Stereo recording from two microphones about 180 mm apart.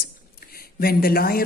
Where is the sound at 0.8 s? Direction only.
55° left (ahead or behind).